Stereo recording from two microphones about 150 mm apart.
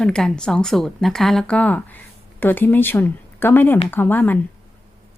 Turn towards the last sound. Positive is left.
turn(degrees=10)  # may be behind; listen again after turning